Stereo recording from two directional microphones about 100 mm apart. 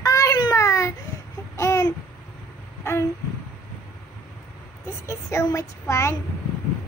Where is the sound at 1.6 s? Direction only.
35° left (ahead or behind).